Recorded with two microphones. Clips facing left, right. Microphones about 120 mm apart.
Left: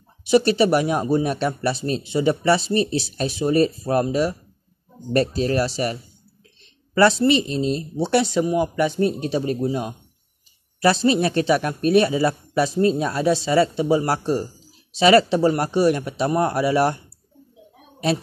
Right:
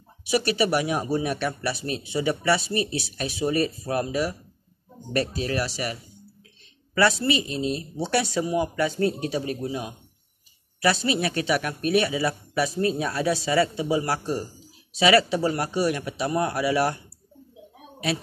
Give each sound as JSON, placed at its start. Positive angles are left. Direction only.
{"t": 0.3, "sound": "speech", "side_deg": 30}
{"t": 10.8, "sound": "speech", "side_deg": 30}
{"t": 13.8, "sound": "speech", "side_deg": 35}